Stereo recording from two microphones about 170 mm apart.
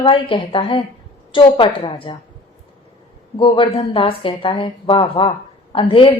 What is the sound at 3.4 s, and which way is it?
A woman's voice, 30° left (ahead or behind).